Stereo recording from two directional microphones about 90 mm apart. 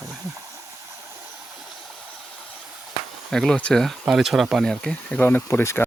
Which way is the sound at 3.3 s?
5° left (ahead or behind).